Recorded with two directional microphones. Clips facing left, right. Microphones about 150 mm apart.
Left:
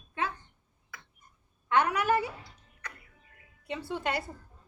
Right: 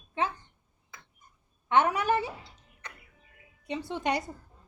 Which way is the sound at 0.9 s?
20° right (ahead or behind).